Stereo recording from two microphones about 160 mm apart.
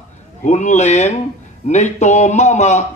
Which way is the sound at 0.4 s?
45° left (ahead or behind).